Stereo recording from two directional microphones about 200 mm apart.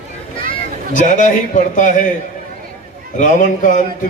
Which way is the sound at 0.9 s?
40° left (ahead or behind).